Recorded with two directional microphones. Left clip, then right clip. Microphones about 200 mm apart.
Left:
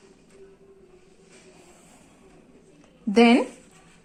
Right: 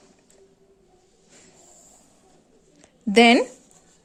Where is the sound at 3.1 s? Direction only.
60° right (ahead or behind).